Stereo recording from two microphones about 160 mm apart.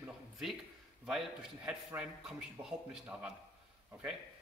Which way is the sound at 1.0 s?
5° right (ahead or behind).